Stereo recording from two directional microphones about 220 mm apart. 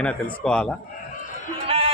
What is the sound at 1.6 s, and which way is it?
Music, 25° right (ahead or behind).